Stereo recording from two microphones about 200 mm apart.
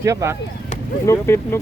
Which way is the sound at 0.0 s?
15° right (ahead or behind).